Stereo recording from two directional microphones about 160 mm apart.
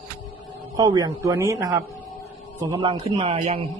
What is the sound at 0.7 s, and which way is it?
A man's voice, 25° right (ahead or behind).